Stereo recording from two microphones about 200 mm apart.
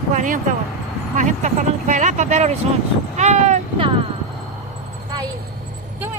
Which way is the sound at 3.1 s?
35° right (ahead or behind).